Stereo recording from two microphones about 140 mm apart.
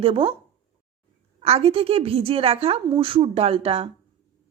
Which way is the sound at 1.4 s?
45° right (ahead or behind).